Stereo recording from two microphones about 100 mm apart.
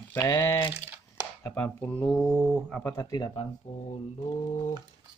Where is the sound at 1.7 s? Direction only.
15° left (ahead or behind).